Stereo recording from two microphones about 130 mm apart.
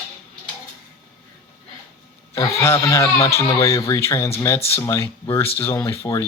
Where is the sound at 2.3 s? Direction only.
25° left (ahead or behind).